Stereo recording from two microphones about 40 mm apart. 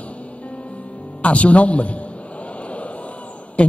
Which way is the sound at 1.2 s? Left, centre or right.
Left.